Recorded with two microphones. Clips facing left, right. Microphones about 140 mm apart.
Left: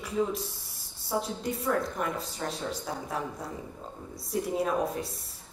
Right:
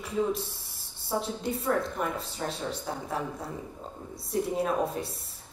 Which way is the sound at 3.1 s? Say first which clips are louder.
Right 1 dB; 25° right (ahead or behind).